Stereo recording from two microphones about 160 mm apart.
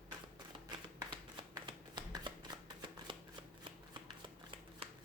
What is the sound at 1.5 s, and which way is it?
Shuffling cards, 25° right (ahead or behind).